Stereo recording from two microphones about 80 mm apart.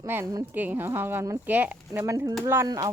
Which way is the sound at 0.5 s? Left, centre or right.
Right.